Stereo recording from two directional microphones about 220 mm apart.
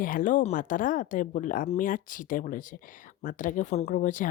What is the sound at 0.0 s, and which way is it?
Speech, 35° left (ahead or behind).